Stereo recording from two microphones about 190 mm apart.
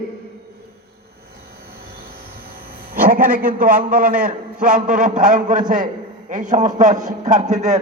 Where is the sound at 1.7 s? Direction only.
55° right (ahead or behind).